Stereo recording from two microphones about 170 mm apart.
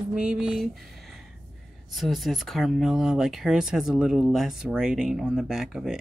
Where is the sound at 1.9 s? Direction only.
Centre (ahead or behind).